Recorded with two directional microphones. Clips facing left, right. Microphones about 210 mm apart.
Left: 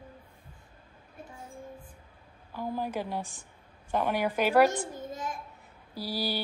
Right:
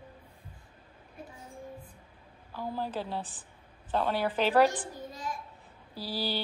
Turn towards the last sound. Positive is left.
turn(degrees=10)  # may be behind; listen again after turning